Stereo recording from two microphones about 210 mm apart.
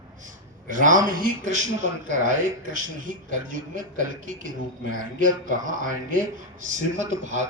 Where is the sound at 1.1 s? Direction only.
35° right (ahead or behind).